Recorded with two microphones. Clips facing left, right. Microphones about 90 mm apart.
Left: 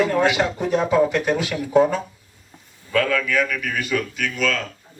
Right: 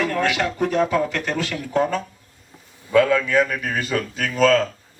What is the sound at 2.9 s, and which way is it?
A man's voice, 20° right (ahead or behind).